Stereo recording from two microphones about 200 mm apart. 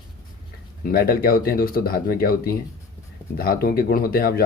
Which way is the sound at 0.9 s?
50° left (ahead or behind).